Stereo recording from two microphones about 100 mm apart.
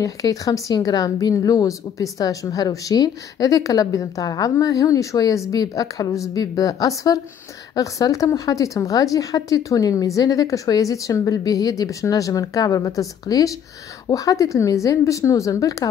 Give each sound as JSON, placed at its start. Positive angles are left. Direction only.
{"t": 0.0, "sound": "a woman's voice", "side_deg": 35}